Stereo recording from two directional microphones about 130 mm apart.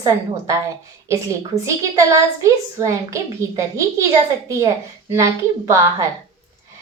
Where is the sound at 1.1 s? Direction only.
25° right (ahead or behind).